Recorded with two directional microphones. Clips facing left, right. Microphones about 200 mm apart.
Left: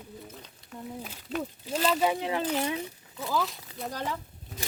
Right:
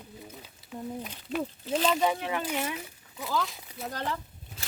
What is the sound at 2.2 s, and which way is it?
Speech, 30° left (ahead or behind).